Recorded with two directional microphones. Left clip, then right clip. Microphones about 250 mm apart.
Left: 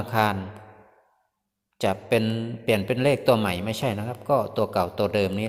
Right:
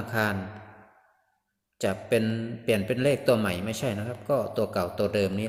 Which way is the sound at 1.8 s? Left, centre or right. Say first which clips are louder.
Left 3 dB; centre.